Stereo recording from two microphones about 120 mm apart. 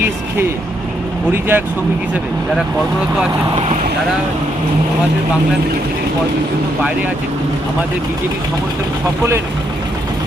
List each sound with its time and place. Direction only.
1.3 s speech: 20° right (ahead or behind)